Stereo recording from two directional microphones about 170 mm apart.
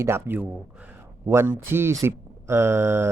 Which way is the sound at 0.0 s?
15° right (ahead or behind).